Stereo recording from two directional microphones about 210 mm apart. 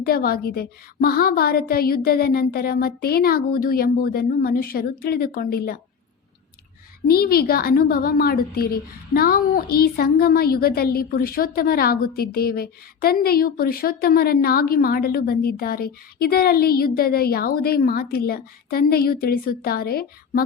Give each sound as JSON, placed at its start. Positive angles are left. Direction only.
{"t": 0.0, "sound": "a woman's voice", "side_deg": 45}
{"t": 7.1, "sound": "a woman's voice", "side_deg": 45}